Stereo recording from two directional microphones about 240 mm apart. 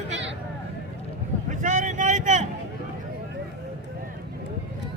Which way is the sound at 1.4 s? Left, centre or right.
Right.